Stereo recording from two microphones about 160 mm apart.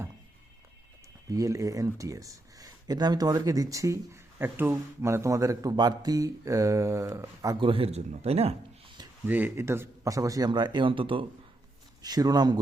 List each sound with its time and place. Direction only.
1.3 s speech: 20° right (ahead or behind); by 8.5 s 40° right (ahead or behind)
9.2 s speech: 10° right (ahead or behind)